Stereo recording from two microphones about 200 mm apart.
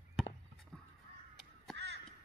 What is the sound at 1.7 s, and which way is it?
Crow, 60° right (ahead or behind).